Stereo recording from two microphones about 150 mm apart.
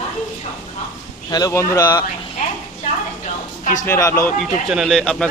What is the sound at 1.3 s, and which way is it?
Speech, 25° left (ahead or behind).